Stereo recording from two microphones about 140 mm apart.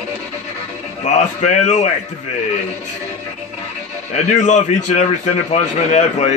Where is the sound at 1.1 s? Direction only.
55° left (ahead or behind).